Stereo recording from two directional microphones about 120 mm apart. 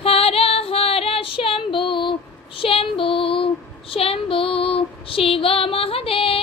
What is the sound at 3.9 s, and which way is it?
Child singing, 50° left (ahead or behind).